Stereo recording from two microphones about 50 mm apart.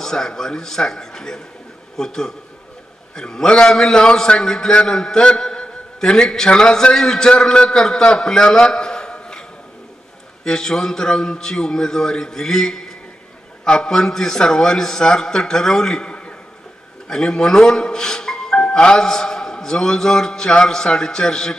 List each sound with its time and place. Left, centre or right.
0.0 s a man's voice: centre
10.4 s a man's voice: centre